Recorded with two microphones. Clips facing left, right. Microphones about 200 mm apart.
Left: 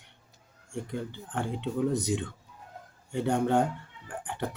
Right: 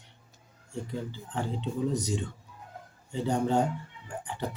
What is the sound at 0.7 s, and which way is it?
Speech, 55° left (ahead or behind).